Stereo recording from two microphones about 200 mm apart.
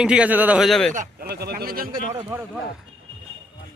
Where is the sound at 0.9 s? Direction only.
45° right (ahead or behind).